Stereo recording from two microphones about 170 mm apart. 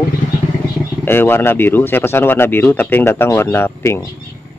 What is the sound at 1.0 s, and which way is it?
Speech, 15° left (ahead or behind).